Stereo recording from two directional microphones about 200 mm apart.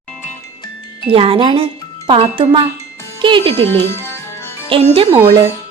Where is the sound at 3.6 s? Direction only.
10° left (ahead or behind).